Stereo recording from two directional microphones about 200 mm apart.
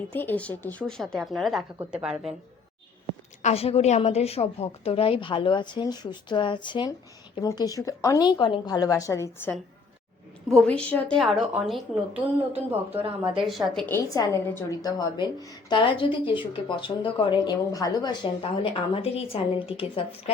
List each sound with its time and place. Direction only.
0.1 s a woman's voice: 10° left (ahead or behind)
3.4 s a woman's voice: 30° left (ahead or behind); by 12.2 s 5° right (ahead or behind)
13.4 s a woman's voice: centre (ahead or behind)
13.8 s a woman's voice: 15° left (ahead or behind)